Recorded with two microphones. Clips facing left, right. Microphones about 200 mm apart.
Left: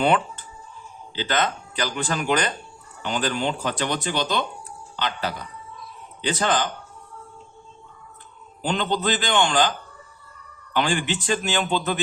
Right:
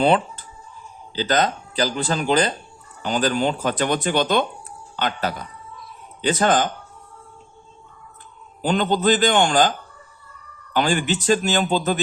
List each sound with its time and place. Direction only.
0.0 s a sound: 35° right (ahead or behind)
1.1 s speech: 40° right (ahead or behind)
8.6 s speech: 45° right (ahead or behind)
10.8 s speech: 45° right (ahead or behind)